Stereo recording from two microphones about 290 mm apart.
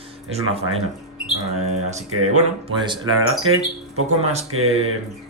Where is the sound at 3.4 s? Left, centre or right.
Right.